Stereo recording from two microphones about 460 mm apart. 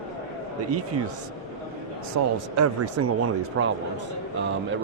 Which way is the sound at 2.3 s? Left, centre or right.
Right.